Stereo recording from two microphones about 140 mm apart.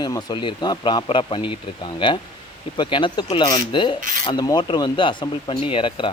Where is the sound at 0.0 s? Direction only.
30° left (ahead or behind).